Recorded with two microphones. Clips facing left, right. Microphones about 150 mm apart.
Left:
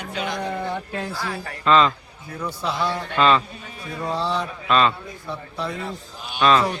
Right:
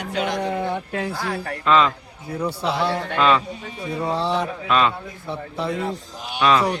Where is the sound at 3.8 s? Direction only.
20° right (ahead or behind).